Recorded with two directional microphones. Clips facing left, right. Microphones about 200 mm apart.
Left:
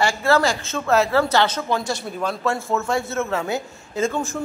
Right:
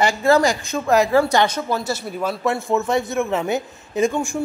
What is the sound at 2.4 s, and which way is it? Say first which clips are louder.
A man's voice: right 3 dB; 15° right (ahead or behind).